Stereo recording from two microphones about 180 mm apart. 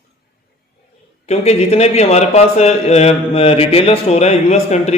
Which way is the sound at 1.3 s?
35° left (ahead or behind).